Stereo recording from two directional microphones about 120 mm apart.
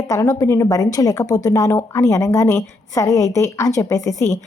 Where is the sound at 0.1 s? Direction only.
30° left (ahead or behind).